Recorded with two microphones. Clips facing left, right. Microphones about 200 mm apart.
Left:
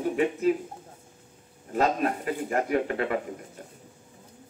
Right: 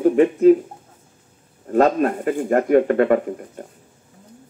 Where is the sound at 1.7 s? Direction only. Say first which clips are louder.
Right 9 dB; 50° right (ahead or behind).